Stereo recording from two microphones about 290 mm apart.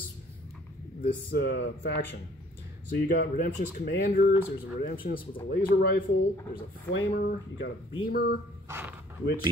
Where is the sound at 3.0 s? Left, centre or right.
Left.